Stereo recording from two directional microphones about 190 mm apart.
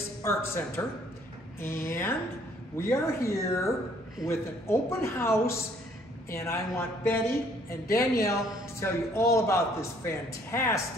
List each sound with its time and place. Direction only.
0.2 s a man's voice: 15° left (ahead or behind)